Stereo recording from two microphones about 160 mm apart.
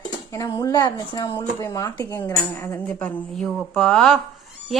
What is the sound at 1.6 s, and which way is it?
Speech, 20° left (ahead or behind).